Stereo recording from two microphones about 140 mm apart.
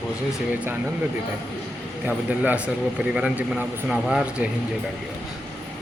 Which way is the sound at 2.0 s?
10° right (ahead or behind).